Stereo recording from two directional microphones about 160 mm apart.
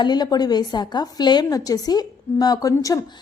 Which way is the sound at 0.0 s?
25° left (ahead or behind).